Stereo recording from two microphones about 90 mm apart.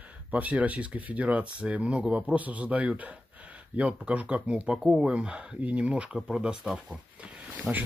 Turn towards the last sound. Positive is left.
turn(degrees=-15)  # may be behind; listen again after turning